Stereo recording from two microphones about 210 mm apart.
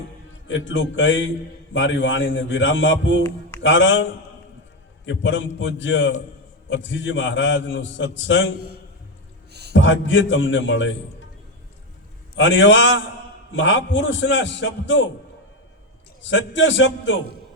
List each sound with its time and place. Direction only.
0.4 s a man's voice: 60° left (ahead or behind)
9.5 s music: 50° right (ahead or behind)
9.7 s a man's voice: 65° left (ahead or behind)
12.4 s a man's voice: 60° left (ahead or behind)
16.3 s a man's voice: 60° left (ahead or behind)